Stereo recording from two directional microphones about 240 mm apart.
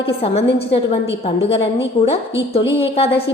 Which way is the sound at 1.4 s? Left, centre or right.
Left.